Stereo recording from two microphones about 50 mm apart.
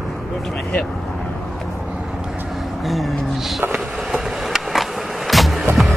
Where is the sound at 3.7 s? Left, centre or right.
Centre.